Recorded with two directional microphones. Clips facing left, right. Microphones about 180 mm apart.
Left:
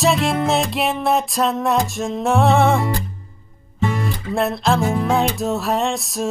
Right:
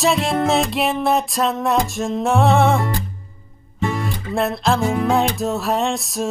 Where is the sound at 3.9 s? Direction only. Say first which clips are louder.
Even; centre (ahead or behind).